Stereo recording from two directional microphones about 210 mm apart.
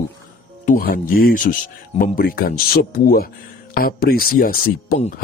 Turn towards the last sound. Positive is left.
turn(degrees=40)  # may be behind; listen again after turning